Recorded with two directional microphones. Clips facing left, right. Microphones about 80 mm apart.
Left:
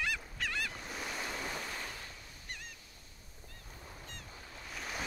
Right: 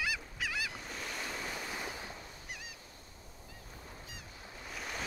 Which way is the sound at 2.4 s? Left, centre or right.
Centre.